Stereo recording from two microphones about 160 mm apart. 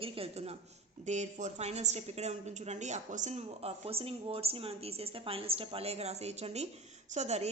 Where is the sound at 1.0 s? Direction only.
45° right (ahead or behind).